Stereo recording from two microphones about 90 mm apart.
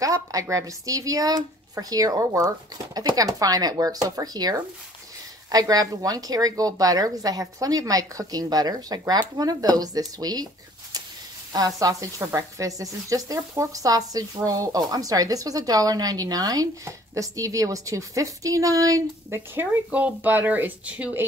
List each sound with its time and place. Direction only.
0.0 s speech: 40° right (ahead or behind)
19.5 s speech: 25° right (ahead or behind)